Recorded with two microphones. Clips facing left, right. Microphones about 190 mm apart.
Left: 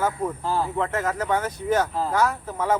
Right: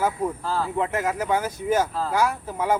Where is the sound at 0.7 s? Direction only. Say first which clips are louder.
Right 1 dB; 10° right (ahead or behind).